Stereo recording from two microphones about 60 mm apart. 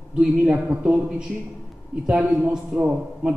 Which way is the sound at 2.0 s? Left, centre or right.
Right.